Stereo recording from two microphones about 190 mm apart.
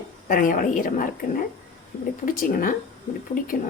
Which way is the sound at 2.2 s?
45° left (ahead or behind).